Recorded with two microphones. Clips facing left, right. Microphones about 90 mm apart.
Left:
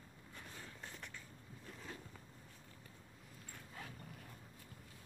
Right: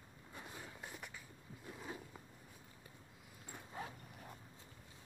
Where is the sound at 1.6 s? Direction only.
15° right (ahead or behind).